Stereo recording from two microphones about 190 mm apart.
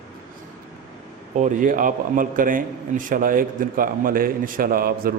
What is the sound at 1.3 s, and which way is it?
A man's voice, 40° right (ahead or behind).